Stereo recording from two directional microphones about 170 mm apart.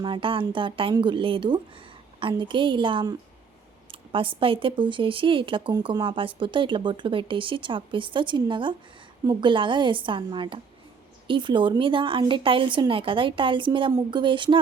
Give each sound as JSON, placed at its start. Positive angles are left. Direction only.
{"t": 0.0, "sound": "speech", "side_deg": -30}